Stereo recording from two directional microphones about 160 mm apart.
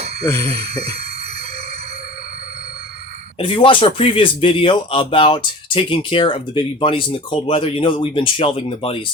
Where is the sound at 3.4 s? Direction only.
30° left (ahead or behind).